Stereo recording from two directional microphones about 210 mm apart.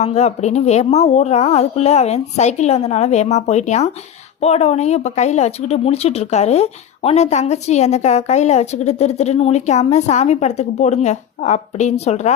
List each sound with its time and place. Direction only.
0.0 s speech: 30° left (ahead or behind)